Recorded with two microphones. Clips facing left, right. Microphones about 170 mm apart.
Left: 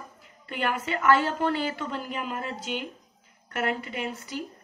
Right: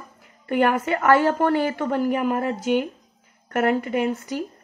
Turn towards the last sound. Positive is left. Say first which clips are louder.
# right 9 dB
turn(degrees=-50)  # may be behind; listen again after turning